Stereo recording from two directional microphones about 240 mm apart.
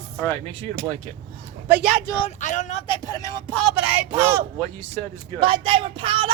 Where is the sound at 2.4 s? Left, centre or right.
Left.